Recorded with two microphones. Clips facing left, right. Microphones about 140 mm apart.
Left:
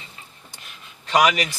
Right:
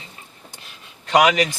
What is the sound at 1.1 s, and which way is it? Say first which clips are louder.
Speech: right 3 dB; 50° right (ahead or behind).